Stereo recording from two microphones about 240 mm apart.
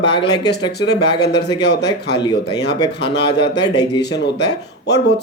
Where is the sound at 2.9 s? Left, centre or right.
Left.